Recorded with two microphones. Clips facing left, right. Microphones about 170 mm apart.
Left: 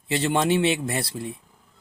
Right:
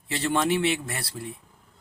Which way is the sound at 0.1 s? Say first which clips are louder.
Left 3 dB; 20° left (ahead or behind).